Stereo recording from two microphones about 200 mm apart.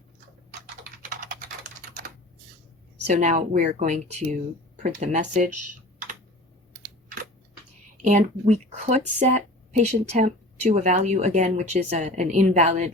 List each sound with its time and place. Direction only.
3.0 s speech: 35° right (ahead or behind)
8.0 s speech: 35° right (ahead or behind)